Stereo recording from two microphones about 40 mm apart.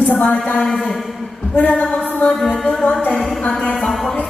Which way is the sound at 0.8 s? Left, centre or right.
Centre.